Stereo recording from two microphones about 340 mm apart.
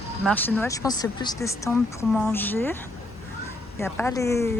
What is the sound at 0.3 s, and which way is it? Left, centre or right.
Speech, centre.